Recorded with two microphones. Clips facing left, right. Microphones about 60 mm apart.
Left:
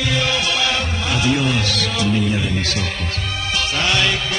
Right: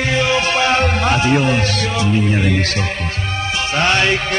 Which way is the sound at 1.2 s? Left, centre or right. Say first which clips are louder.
Right 3 dB; right.